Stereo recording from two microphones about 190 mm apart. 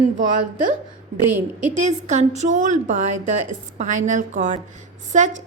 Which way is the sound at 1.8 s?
40° right (ahead or behind).